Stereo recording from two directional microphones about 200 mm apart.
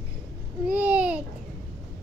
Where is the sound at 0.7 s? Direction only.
5° right (ahead or behind).